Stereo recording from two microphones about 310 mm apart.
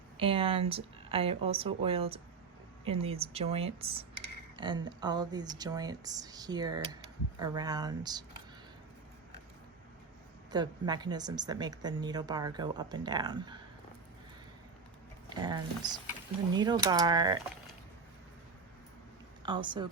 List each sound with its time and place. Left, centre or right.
0.2 s a woman's voice: centre
10.5 s speech: centre
15.4 s speech: centre
19.4 s speech: centre